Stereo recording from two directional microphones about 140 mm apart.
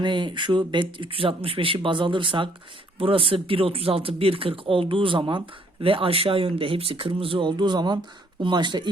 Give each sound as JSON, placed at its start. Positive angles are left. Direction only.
{"t": 0.0, "sound": "speech", "side_deg": -35}